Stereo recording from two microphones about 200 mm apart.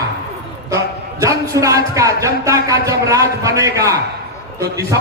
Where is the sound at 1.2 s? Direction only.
15° right (ahead or behind).